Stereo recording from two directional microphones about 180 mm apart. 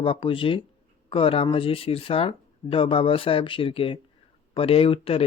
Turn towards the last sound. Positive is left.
turn(degrees=30)  # may be behind; listen again after turning